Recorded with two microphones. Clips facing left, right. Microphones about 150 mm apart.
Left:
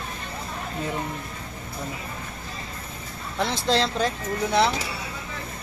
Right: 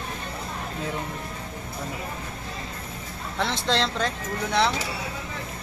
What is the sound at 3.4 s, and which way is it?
Speech, 5° left (ahead or behind).